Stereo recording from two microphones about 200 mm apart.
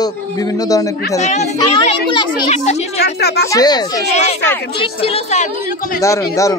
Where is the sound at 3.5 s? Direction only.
20° left (ahead or behind).